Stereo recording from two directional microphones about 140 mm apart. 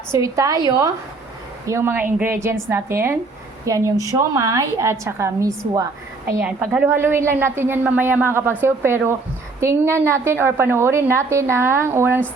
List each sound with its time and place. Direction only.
0.1 s a woman's voice: 20° right (ahead or behind)